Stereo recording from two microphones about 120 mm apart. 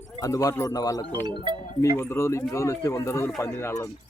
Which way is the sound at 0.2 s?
30° left (ahead or behind).